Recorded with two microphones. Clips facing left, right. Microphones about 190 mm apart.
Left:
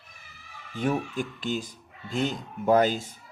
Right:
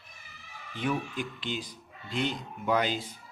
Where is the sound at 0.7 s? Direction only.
45° left (ahead or behind).